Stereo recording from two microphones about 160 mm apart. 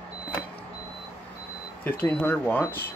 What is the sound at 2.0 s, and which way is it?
Speech, 10° left (ahead or behind).